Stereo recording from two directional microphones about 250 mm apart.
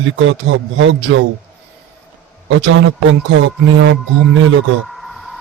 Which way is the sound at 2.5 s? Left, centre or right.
Right.